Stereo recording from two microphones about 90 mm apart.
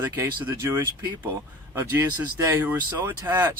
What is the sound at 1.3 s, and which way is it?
Speech, 25° right (ahead or behind).